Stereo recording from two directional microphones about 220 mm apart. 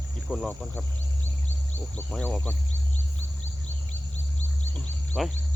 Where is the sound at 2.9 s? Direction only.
30° left (ahead or behind).